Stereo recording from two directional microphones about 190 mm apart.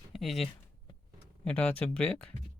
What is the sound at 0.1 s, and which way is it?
Speech, centre (ahead or behind).